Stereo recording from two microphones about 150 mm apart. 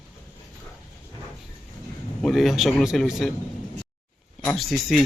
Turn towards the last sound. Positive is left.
turn(degrees=0)  # may be behind; listen again after turning